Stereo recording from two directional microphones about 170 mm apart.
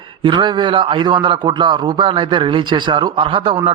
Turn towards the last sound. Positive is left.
turn(degrees=-30)  # may be behind; listen again after turning